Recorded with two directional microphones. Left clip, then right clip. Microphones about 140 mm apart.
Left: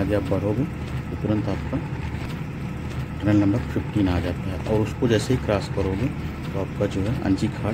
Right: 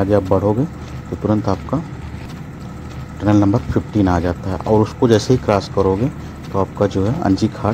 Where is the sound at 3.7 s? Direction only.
30° right (ahead or behind).